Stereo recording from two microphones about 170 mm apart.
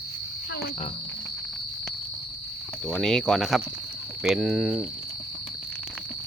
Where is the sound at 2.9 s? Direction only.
5° left (ahead or behind).